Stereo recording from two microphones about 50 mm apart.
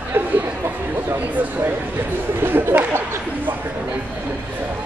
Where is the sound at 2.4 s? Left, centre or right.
Right.